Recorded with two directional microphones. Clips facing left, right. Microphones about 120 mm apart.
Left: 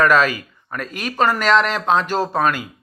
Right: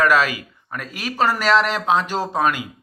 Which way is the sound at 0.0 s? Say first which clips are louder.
Left 2 dB; 10° right (ahead or behind).